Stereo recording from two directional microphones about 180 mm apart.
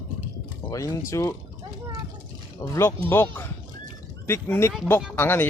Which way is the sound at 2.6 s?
15° left (ahead or behind).